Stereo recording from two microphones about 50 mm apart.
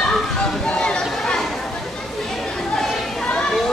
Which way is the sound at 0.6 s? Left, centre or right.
Left.